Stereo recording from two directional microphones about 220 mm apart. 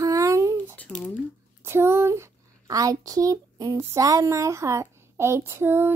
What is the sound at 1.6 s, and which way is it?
A woman's voice, 10° right (ahead or behind).